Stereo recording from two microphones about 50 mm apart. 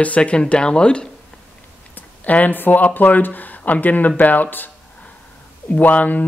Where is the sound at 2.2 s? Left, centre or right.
Left.